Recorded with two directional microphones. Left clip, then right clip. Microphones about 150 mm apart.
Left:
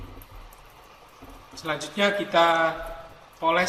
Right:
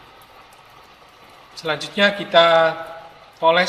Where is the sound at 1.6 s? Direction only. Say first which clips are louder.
Right 6 dB; 45° right (ahead or behind).